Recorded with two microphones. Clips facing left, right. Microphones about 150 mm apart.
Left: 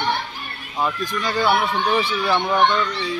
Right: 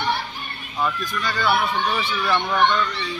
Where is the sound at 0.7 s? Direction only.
20° left (ahead or behind).